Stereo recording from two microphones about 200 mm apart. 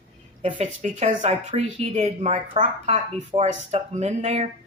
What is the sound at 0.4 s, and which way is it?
Speech, 35° right (ahead or behind).